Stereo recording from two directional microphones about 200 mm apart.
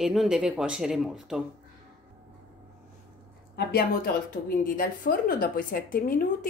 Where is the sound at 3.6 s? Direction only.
50° left (ahead or behind).